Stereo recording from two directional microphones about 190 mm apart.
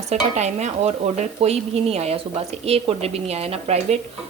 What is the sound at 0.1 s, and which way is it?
Speech, 35° right (ahead or behind).